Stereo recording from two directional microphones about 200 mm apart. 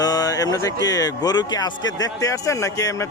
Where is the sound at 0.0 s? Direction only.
20° left (ahead or behind).